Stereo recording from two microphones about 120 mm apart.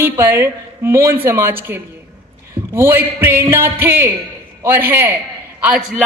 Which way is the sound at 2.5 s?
20° right (ahead or behind).